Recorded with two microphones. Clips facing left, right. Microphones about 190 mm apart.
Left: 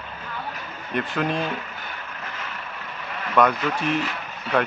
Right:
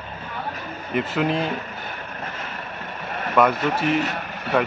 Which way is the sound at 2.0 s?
45° right (ahead or behind).